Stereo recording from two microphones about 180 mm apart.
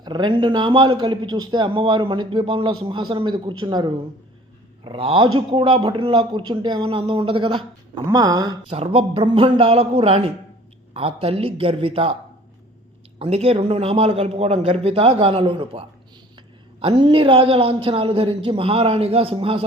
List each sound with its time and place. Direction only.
0.0 s a man's voice: 25° right (ahead or behind)
8.7 s a man's voice: 30° right (ahead or behind)
13.1 s a man's voice: 35° right (ahead or behind)